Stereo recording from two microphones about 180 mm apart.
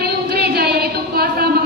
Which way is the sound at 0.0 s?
60° right (ahead or behind).